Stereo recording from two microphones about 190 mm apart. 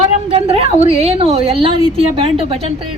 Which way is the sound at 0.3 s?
30° right (ahead or behind).